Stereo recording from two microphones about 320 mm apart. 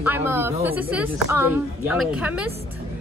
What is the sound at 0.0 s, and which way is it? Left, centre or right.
A woman's voice, centre.